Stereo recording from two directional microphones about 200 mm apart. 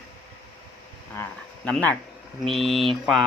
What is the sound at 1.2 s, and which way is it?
Speech, 5° left (ahead or behind).